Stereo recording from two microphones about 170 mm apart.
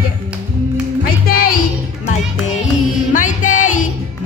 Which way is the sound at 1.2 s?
60° left (ahead or behind).